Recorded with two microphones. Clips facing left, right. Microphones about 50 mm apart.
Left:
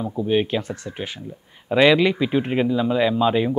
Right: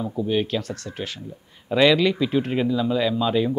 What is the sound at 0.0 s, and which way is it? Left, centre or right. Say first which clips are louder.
Speech: left 2 dB; centre.